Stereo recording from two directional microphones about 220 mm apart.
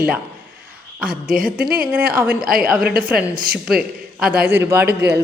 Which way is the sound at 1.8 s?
5° right (ahead or behind).